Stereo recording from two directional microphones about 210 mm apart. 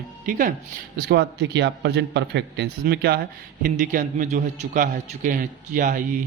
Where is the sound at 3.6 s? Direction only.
40° right (ahead or behind).